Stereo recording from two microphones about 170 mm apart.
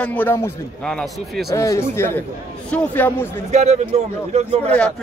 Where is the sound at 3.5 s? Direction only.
40° right (ahead or behind).